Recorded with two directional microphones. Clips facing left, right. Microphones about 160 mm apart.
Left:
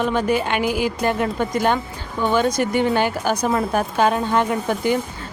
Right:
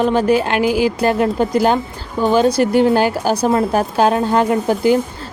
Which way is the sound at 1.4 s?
35° right (ahead or behind).